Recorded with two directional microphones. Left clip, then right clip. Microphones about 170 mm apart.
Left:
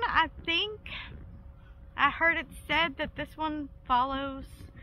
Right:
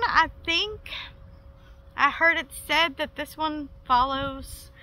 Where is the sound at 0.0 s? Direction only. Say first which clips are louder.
Right 5 dB; 15° right (ahead or behind).